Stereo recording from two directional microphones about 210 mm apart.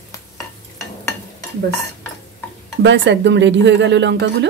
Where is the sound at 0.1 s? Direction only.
15° left (ahead or behind).